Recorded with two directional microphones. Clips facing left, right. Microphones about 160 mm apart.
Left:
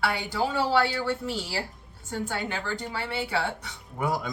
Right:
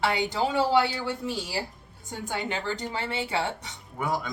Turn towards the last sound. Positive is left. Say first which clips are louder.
# left 1 dB
turn(degrees=0)  # may be behind; listen again after turning